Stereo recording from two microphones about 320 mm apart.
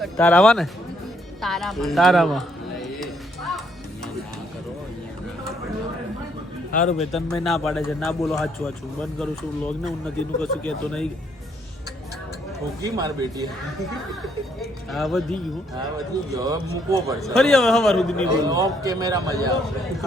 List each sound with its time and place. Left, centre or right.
0.0 s a man's voice: centre
1.4 s music: centre
6.7 s a man's voice: left
6.9 s a man's voice: centre
12.8 s speech: centre
14.6 s a man's voice: centre
16.3 s speech: centre
17.3 s a man's voice: centre
18.3 s speech: centre